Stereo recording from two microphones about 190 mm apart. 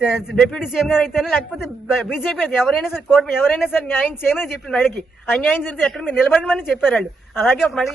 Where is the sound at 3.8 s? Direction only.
10° left (ahead or behind).